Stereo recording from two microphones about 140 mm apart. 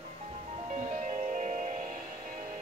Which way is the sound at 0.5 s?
55° right (ahead or behind).